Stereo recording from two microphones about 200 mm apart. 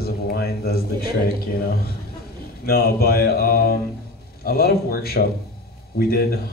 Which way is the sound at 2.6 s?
50° left (ahead or behind).